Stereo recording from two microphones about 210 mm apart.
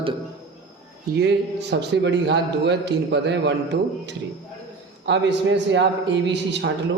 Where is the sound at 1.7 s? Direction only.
55° right (ahead or behind).